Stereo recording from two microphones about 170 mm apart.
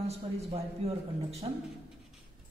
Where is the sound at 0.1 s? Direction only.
40° right (ahead or behind).